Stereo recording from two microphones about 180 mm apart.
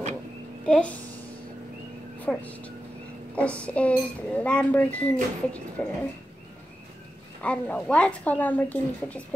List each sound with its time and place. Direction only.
0.7 s a child's voice: 5° left (ahead or behind)
2.1 s a woman's voice: 10° left (ahead or behind)
7.4 s speech: 5° left (ahead or behind)